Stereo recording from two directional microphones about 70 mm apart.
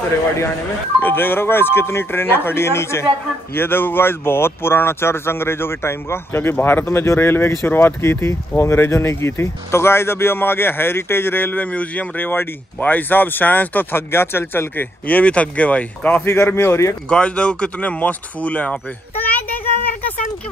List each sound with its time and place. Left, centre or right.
1.0 s speech: left
16.4 s speech: left
17.1 s speech: centre